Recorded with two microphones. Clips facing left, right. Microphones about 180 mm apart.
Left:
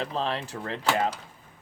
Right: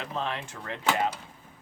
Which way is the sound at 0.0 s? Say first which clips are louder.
Left 4 dB; 35° left (ahead or behind).